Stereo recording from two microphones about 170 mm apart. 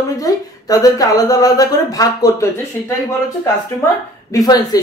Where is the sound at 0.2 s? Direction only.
20° left (ahead or behind).